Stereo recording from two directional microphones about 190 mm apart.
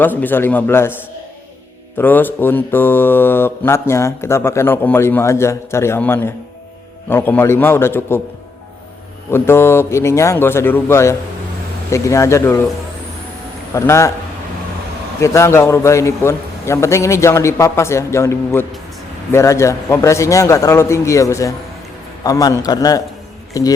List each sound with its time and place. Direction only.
0.0 s mantra: 10° left (ahead or behind)
2.0 s mantra: 10° left (ahead or behind)
9.3 s mantra: 15° left (ahead or behind)
13.7 s mantra: 15° left (ahead or behind)
15.2 s mantra: 15° left (ahead or behind)
22.2 s a man's voice: 20° left (ahead or behind)
23.6 s mantra: 20° left (ahead or behind)